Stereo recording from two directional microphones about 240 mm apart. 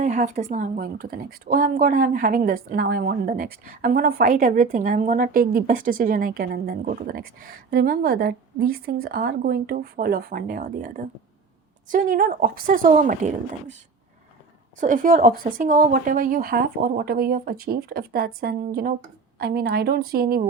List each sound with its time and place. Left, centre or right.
0.0 s a woman's voice: right
14.8 s a woman's voice: right